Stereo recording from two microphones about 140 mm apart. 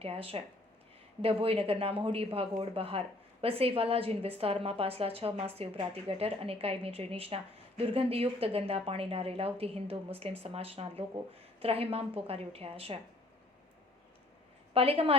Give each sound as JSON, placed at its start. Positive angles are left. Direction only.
{"t": 0.0, "sound": "speech", "side_deg": -45}
{"t": 14.7, "sound": "a woman's voice", "side_deg": -40}